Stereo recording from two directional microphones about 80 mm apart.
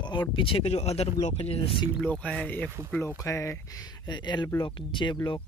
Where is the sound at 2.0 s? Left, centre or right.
Centre.